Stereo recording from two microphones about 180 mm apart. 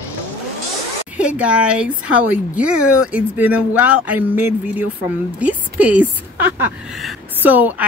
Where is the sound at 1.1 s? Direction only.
5° right (ahead or behind).